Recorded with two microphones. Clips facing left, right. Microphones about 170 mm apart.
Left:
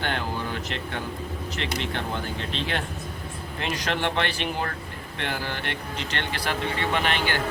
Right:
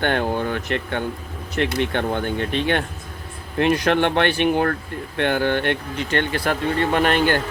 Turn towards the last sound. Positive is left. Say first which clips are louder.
# right 7 dB
turn(degrees=-50)  # may be behind; listen again after turning